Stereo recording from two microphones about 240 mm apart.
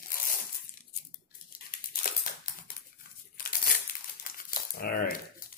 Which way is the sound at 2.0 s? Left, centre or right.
Left.